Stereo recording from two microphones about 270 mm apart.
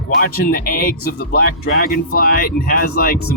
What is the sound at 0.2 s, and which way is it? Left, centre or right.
Speech, left.